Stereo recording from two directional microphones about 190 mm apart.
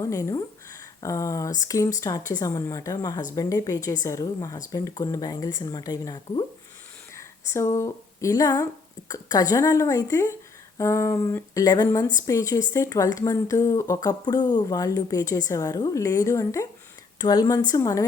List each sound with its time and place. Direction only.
0.0 s speech: 15° left (ahead or behind)